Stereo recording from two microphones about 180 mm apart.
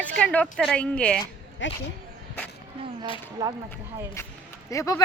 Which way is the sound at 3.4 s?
20° right (ahead or behind).